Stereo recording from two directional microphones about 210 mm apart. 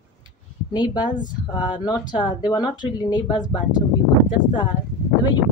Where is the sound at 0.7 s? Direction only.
20° left (ahead or behind).